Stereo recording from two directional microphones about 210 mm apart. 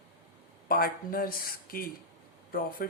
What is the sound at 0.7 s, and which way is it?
A man's voice, 45° left (ahead or behind).